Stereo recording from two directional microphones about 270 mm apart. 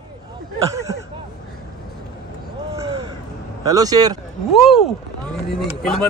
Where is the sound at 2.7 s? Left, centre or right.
Centre.